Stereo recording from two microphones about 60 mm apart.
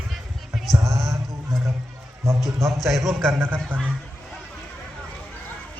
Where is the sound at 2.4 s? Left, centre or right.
Centre.